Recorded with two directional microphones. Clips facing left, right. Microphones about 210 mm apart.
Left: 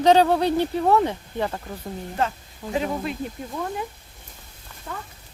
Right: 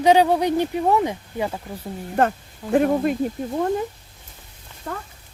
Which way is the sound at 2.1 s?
55° right (ahead or behind).